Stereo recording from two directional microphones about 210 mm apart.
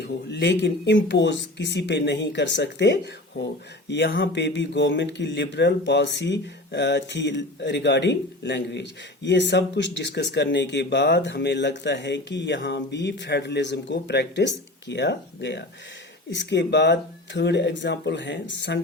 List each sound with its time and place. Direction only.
0.0 s speech: 55° left (ahead or behind)